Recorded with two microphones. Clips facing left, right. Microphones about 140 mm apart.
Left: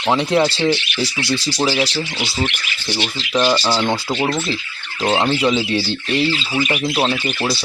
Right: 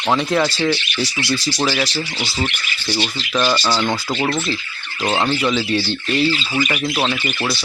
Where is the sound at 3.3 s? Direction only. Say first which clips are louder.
Left 2 dB; 15° left (ahead or behind).